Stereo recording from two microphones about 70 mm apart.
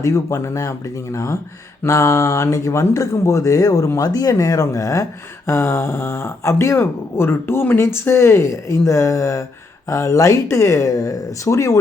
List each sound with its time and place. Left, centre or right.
0.0 s speech: left
5.5 s speech: left